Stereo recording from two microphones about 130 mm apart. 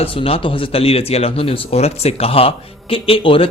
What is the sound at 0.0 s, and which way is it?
Speech, 45° left (ahead or behind).